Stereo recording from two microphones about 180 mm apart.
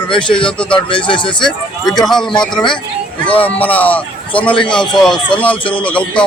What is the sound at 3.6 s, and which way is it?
Speech, 10° left (ahead or behind).